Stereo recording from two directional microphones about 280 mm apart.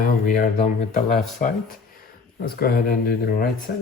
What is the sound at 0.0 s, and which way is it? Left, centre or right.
Speech, left.